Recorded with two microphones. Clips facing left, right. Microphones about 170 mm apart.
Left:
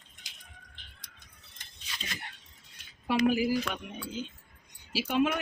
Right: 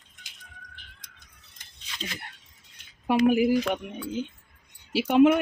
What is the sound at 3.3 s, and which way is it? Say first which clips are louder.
A woman's voice: right 6 dB; 60° right (ahead or behind).